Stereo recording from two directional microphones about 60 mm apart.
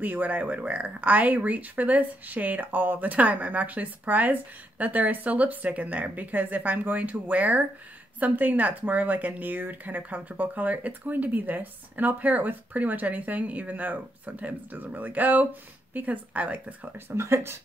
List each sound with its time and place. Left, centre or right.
0.0 s speech: right
17.1 s speech: right